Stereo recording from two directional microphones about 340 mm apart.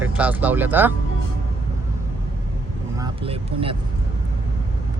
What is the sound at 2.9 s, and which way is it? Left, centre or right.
Vehicle, centre.